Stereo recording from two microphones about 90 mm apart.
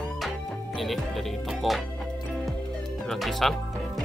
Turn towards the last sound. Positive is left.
turn(degrees=0)  # may be behind; listen again after turning